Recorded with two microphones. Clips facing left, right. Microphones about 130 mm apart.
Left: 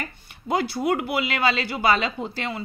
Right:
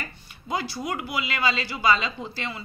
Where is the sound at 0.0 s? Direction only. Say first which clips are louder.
Left 4 dB; 60° left (ahead or behind).